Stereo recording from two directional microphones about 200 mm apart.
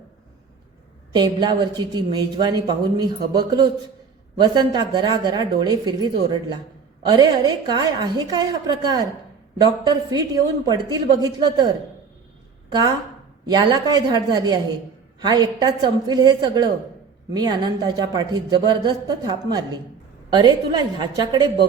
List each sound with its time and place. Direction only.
1.1 s a woman's voice: 20° right (ahead or behind)
13.4 s a woman's voice: 20° right (ahead or behind)